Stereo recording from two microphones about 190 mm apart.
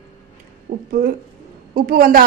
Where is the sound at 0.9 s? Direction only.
50° right (ahead or behind).